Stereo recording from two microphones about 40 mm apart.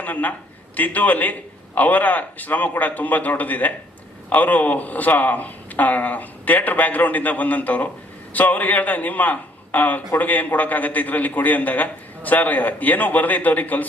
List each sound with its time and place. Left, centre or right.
0.0 s a man's voice: left